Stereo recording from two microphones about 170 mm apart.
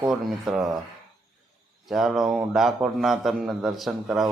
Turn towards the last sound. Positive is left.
turn(degrees=0)  # may be behind; listen again after turning